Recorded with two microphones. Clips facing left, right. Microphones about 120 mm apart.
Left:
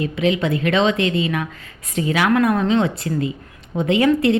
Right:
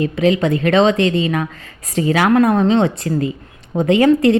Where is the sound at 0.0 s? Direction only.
40° right (ahead or behind).